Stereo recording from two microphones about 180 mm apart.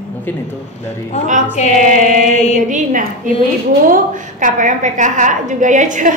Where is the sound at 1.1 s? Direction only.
40° left (ahead or behind).